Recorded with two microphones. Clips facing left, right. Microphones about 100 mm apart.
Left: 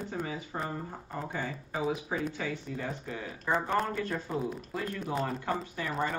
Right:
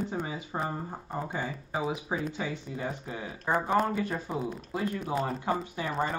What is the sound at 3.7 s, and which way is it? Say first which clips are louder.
Speech: right 3 dB; 5° right (ahead or behind).